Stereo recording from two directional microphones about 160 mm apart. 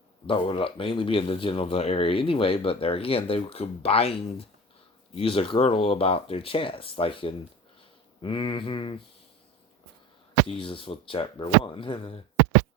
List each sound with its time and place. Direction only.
0.3 s speech: 35° left (ahead or behind)
10.5 s speech: 35° left (ahead or behind)